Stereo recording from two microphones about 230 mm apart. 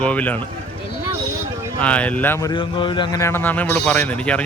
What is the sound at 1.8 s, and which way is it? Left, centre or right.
Speech, centre.